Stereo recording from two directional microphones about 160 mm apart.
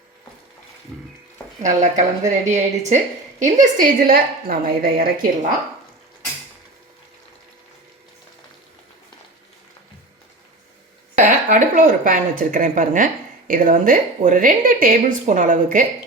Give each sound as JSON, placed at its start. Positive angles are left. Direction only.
{"t": 1.6, "sound": "a woman's voice", "side_deg": -50}
{"t": 11.4, "sound": "a woman's voice", "side_deg": -55}